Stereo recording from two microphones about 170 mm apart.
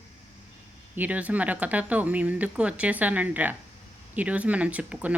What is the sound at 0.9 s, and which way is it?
Speech, 10° right (ahead or behind).